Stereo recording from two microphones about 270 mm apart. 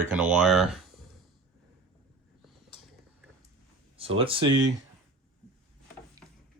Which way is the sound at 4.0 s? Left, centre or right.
Right.